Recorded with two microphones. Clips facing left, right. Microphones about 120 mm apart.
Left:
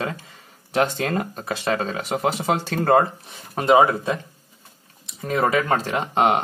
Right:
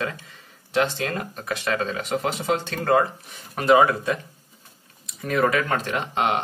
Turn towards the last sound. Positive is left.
turn(degrees=35)  # may be behind; listen again after turning